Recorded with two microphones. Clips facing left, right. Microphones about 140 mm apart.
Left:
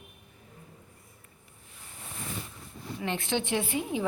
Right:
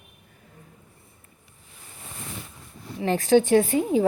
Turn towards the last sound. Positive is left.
turn(degrees=-40)  # may be behind; listen again after turning